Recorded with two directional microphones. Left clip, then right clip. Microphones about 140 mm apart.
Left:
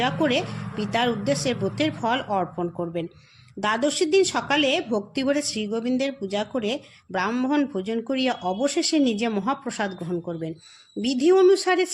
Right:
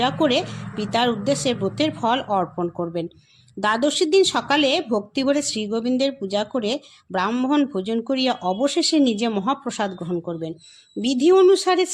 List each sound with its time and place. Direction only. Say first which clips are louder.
0.0 s a woman's voice: right 3 dB; 40° right (ahead or behind)